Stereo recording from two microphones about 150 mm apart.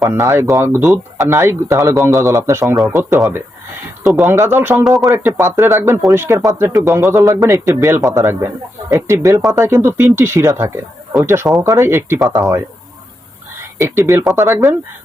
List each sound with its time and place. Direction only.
0.0 s a man's voice: 20° right (ahead or behind)
4.8 s speech: centre (ahead or behind)
5.1 s a man's voice: 15° right (ahead or behind)
13.7 s a man's voice: 20° right (ahead or behind)